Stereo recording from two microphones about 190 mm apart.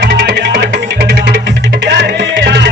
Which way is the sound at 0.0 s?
60° right (ahead or behind).